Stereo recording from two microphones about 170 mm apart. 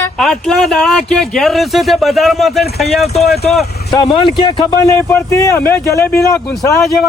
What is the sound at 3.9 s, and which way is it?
Speech, 25° left (ahead or behind).